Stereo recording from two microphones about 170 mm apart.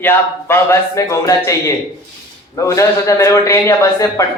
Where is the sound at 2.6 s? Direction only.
20° left (ahead or behind).